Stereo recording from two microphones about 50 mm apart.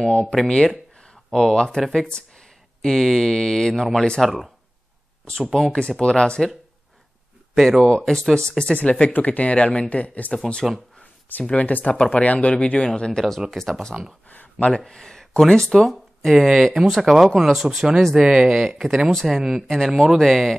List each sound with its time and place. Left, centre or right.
0.3 s speech: centre
1.6 s speech: centre
1.9 s a sound: centre
2.9 s speech: centre
4.2 s speech: centre
5.7 s speech: centre
7.5 s speech: centre
7.9 s speech: centre; by 10.3 s left
10.3 s speech: centre
11.4 s speech: left
13.5 s speech: centre
14.3 s a sound: left
14.9 s speech: centre